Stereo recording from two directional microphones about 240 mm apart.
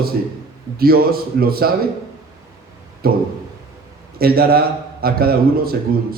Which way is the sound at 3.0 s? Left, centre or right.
Right.